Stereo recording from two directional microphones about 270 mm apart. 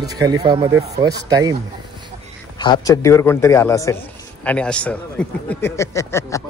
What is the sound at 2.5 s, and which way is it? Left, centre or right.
A man's voice, centre.